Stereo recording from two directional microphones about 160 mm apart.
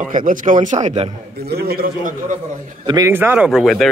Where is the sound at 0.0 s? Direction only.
55° right (ahead or behind).